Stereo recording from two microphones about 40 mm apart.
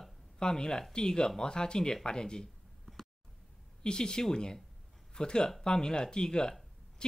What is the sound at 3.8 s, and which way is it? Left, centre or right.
Speech, centre.